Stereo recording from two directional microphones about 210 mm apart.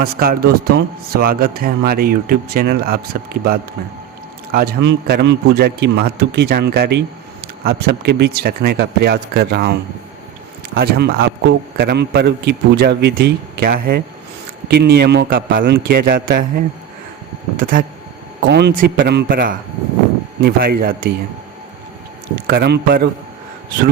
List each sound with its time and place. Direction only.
0.0 s a man's voice: 45° right (ahead or behind)
10.8 s a man's voice: 50° right (ahead or behind)
17.6 s speech: 40° right (ahead or behind)
18.4 s a man's voice: 50° right (ahead or behind)
22.4 s a man's voice: 50° right (ahead or behind)